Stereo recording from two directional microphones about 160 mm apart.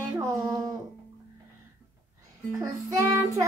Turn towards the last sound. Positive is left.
turn(degrees=-20)  # may be behind; listen again after turning